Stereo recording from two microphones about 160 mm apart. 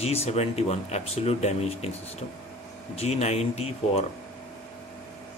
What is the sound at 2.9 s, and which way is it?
Speech, 40° left (ahead or behind).